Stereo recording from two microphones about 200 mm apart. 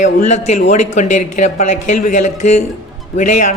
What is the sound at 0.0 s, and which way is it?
Speech, 35° left (ahead or behind).